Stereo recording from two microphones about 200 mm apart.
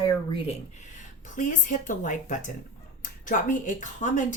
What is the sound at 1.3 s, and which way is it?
Speech, 40° left (ahead or behind).